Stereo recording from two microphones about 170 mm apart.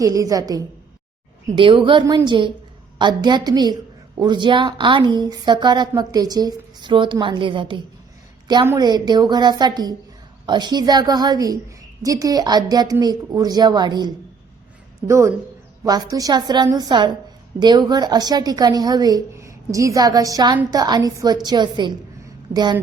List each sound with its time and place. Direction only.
0.0 s a woman's voice: 20° right (ahead or behind)
8.6 s a woman's voice: 20° right (ahead or behind)